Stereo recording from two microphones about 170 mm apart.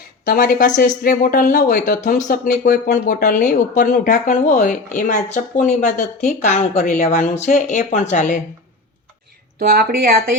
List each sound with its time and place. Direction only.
0.3 s speech: 50° left (ahead or behind)
9.6 s speech: 60° right (ahead or behind)